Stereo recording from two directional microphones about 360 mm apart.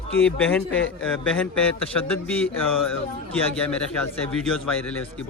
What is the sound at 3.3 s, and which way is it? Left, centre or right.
Speech, centre.